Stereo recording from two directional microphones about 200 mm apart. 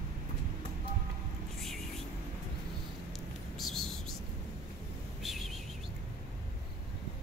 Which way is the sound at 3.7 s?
Centre (ahead or behind).